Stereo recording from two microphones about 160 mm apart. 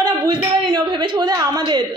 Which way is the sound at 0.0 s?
25° right (ahead or behind).